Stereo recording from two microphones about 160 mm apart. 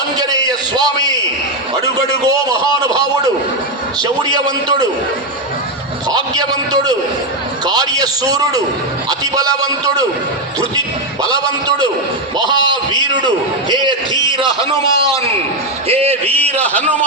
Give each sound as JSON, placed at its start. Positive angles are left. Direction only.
{"t": 0.2, "sound": "a man's voice", "side_deg": -25}
{"t": 4.0, "sound": "a man's voice", "side_deg": -25}
{"t": 6.1, "sound": "a man's voice", "side_deg": -25}
{"t": 13.0, "sound": "a man's voice", "side_deg": -25}
{"t": 16.6, "sound": "a man's voice", "side_deg": 10}